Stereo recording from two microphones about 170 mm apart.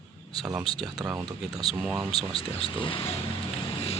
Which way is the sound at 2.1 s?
35° left (ahead or behind).